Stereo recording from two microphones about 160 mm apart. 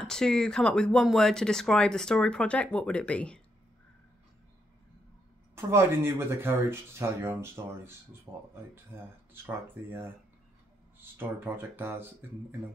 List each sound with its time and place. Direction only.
0.0 s speech: 5° left (ahead or behind)
5.6 s speech: 15° right (ahead or behind)